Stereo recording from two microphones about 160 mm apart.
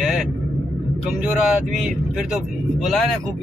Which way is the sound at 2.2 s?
5° right (ahead or behind).